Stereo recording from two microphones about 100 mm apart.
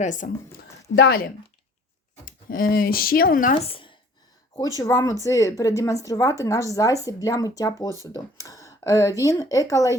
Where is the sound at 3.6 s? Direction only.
65° left (ahead or behind).